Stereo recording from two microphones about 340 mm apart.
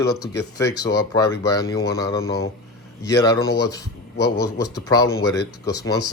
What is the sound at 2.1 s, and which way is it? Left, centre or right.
Speech, left.